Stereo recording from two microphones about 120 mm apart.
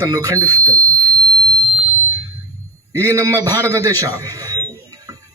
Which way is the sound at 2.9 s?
25° right (ahead or behind).